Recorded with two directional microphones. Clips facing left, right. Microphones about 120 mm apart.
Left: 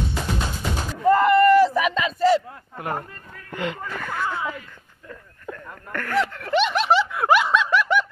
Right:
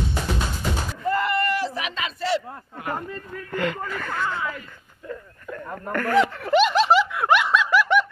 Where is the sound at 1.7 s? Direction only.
45° left (ahead or behind).